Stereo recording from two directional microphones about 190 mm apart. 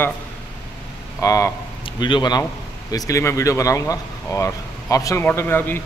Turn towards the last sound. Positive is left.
turn(degrees=10)  # may be behind; listen again after turning